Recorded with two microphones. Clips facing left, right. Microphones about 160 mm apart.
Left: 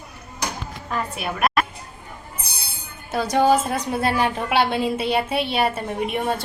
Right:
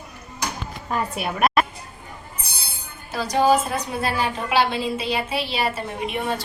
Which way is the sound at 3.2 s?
55° left (ahead or behind).